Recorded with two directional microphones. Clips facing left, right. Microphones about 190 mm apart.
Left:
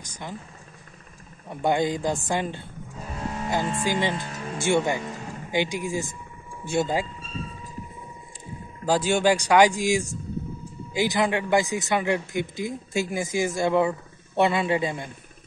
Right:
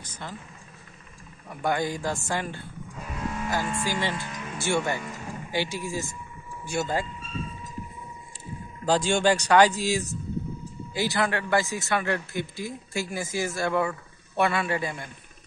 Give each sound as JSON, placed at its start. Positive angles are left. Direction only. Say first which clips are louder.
{"t": 0.0, "sound": "speech", "louder": "left 2 dB", "side_deg": 15}
{"t": 1.5, "sound": "speech", "louder": "left 4 dB", "side_deg": 25}
{"t": 3.0, "sound": "speech", "louder": "left 1 dB", "side_deg": 35}
{"t": 4.6, "sound": "a man's voice", "louder": "left 4 dB", "side_deg": 20}
{"t": 8.8, "sound": "a man's voice", "louder": "left 1 dB", "side_deg": 10}